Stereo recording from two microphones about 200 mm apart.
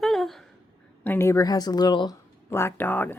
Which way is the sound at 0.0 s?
Centre (ahead or behind).